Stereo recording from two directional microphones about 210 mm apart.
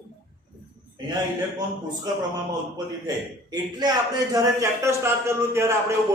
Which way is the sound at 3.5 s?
20° right (ahead or behind).